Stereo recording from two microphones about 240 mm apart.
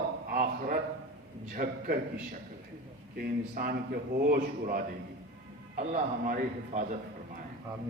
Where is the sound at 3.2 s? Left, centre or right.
Right.